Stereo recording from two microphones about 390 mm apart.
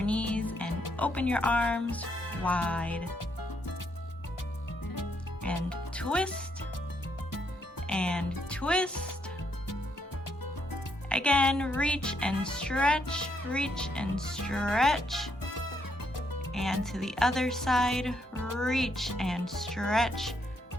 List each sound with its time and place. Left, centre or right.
0.0 s music: centre
0.9 s speech: centre
5.6 s speech: centre
7.9 s speech: centre
11.1 s speech: centre
16.5 s speech: centre